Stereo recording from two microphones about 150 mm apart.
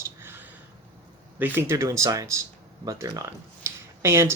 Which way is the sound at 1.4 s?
15° right (ahead or behind).